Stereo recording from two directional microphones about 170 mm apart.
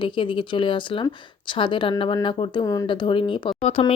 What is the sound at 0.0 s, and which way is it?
Speech, 30° left (ahead or behind).